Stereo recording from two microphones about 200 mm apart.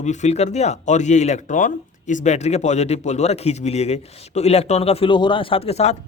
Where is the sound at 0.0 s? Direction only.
35° left (ahead or behind).